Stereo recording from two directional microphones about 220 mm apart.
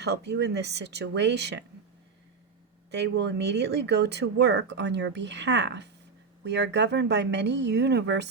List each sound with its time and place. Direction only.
0.0 s speech: 50° right (ahead or behind)
2.9 s speech: 50° right (ahead or behind)